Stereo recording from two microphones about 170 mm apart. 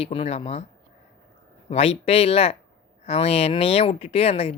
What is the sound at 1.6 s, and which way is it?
Speech, 35° left (ahead or behind).